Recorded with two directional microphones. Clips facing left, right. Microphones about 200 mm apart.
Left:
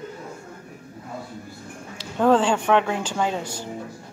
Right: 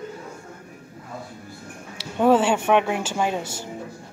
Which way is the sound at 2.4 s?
20° right (ahead or behind).